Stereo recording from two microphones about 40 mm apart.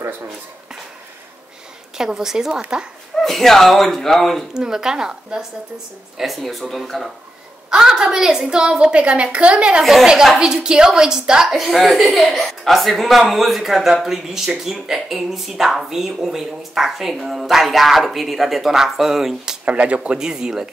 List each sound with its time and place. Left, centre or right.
2.0 s speech: centre
3.3 s speech: centre
4.6 s speech: centre
6.1 s speech: centre
7.7 s a woman's voice: centre
9.8 s speech: centre
10.4 s speech: centre
11.4 s speech: centre
19.6 s speech: right
20.2 s speech: centre